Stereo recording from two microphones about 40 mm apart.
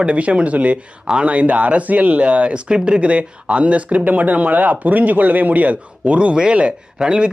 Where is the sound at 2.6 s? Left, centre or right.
Right.